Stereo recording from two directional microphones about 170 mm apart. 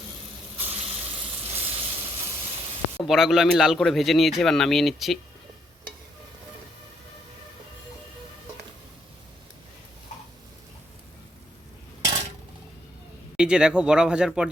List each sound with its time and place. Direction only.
0.5 s sizzle: 10° right (ahead or behind)
0.8 s sizzle: 35° right (ahead or behind)
3.1 s speech: centre (ahead or behind)
13.3 s speech: 5° right (ahead or behind)